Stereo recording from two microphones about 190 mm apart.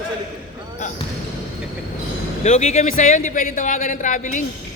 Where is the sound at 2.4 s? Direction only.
35° left (ahead or behind).